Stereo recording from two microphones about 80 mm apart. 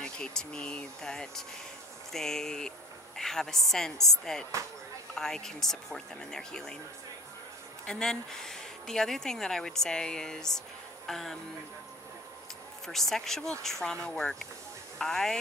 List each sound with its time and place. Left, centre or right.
0.0 s speech: centre
7.8 s speech: centre
12.8 s speech: centre